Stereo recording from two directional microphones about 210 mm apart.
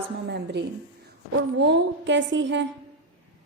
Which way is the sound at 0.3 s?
55° right (ahead or behind).